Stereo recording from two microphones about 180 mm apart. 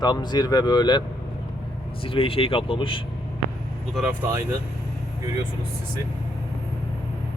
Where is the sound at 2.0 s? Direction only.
30° left (ahead or behind).